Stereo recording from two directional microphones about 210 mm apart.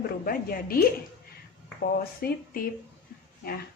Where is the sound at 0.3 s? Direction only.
45° left (ahead or behind).